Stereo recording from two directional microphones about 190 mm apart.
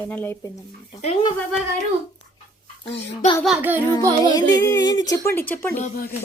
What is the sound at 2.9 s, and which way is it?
Speech, 30° left (ahead or behind).